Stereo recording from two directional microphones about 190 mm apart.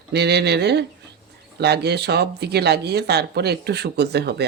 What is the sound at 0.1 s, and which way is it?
Speech, 60° right (ahead or behind).